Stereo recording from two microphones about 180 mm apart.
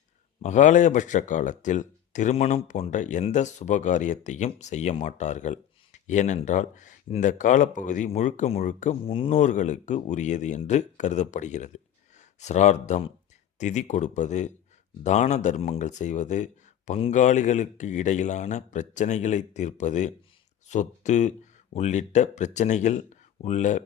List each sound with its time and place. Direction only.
0.4 s speech: 45° left (ahead or behind)